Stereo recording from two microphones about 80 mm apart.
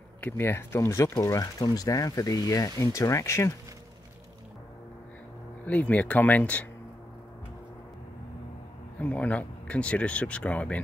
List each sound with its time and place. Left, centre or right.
0.2 s speech: left
5.7 s speech: centre
8.9 s speech: centre